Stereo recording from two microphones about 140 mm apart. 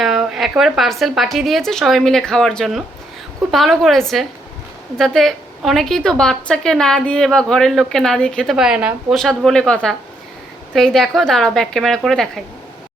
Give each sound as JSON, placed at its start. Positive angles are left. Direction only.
{"t": 0.0, "sound": "a woman's voice", "side_deg": 0}